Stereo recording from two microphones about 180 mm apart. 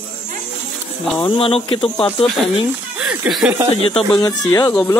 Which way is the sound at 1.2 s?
30° left (ahead or behind).